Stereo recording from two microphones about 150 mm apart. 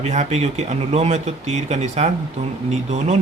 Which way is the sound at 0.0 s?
50° right (ahead or behind).